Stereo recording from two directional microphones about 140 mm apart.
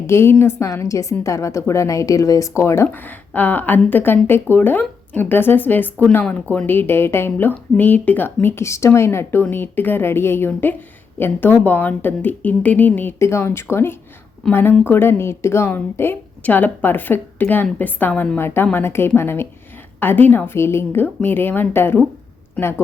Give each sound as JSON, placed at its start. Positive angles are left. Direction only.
{"t": 0.1, "sound": "a woman's voice", "side_deg": 15}